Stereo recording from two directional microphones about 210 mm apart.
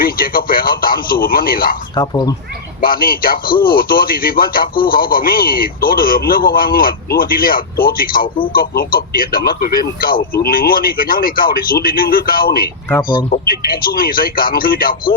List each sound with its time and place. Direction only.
0.0 s a man's voice: 45° left (ahead or behind)
2.0 s speech: 20° left (ahead or behind)
2.8 s a man's voice: 45° left (ahead or behind)